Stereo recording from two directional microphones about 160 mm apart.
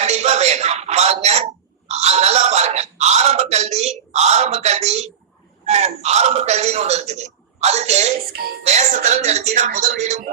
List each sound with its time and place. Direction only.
0.0 s a man's voice: 45° right (ahead or behind)